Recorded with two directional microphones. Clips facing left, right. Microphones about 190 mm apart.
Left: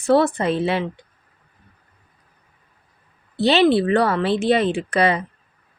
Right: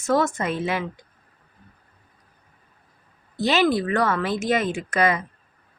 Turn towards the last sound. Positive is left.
turn(degrees=30)  # may be behind; listen again after turning